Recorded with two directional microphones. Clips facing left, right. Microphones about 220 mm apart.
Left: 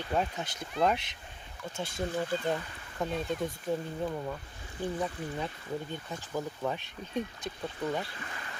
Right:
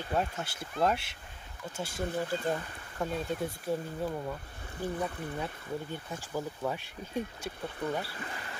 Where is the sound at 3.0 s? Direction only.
10° right (ahead or behind).